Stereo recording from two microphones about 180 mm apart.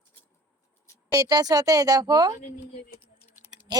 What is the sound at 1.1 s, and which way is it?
A woman's voice, 20° right (ahead or behind).